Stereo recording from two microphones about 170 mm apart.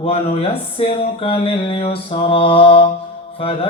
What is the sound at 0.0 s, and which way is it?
Speech, 35° left (ahead or behind).